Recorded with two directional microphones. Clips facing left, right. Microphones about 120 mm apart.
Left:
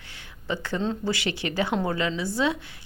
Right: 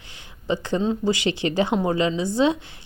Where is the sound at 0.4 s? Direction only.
20° right (ahead or behind).